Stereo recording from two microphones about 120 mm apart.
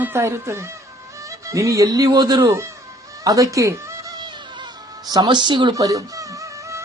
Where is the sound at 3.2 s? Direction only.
25° right (ahead or behind).